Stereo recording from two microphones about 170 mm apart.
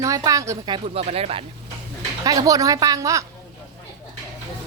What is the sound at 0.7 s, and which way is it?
Speech, 35° right (ahead or behind).